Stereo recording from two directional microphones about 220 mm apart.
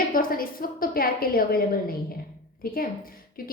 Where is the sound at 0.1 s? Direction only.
40° left (ahead or behind).